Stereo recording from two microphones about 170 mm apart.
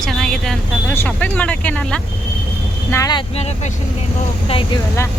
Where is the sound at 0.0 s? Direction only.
Centre (ahead or behind).